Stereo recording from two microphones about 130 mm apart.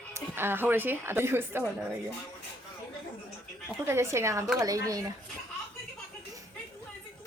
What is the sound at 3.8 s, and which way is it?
Speech, 20° right (ahead or behind).